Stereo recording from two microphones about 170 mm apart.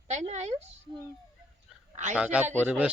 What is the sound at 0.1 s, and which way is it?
Speech, 40° right (ahead or behind).